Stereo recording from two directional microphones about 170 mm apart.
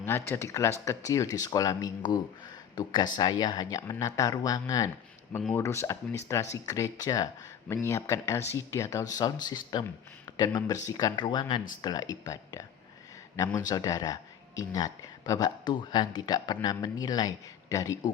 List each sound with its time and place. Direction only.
0.3 s speech: 15° left (ahead or behind)